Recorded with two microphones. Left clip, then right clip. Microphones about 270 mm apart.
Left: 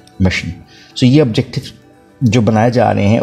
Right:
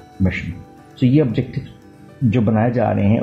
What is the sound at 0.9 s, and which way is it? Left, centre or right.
Speech, left.